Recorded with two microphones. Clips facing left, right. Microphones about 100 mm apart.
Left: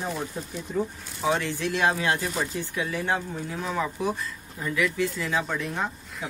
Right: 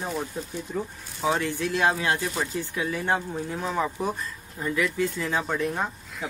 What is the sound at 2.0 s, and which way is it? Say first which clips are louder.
Speech: even; 20° right (ahead or behind).